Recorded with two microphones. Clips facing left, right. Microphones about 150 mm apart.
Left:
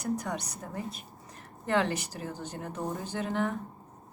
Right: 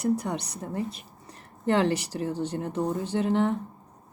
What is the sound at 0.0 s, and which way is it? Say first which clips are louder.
A woman's voice: right 6 dB; 30° right (ahead or behind).